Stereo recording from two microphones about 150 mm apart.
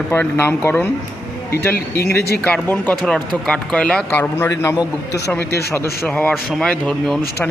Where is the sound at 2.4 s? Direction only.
10° left (ahead or behind).